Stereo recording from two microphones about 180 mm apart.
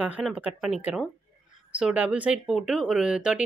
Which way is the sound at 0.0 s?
5° right (ahead or behind).